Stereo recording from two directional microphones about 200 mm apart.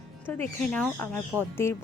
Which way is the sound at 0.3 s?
5° left (ahead or behind).